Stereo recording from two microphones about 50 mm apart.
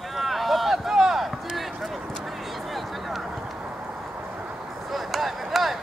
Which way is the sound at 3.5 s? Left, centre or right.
Right.